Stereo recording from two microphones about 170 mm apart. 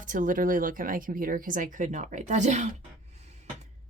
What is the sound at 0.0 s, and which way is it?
A woman's voice, 50° right (ahead or behind).